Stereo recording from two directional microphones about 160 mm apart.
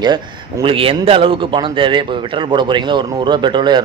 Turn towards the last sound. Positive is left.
turn(degrees=-30)  # may be behind; listen again after turning